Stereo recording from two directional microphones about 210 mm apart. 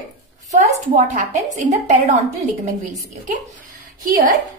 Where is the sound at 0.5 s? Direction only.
35° right (ahead or behind).